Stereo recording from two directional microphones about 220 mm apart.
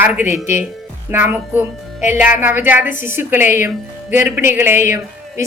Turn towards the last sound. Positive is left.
turn(degrees=-10)  # may be behind; listen again after turning